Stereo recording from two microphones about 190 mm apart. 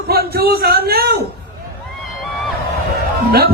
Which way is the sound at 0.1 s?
55° right (ahead or behind).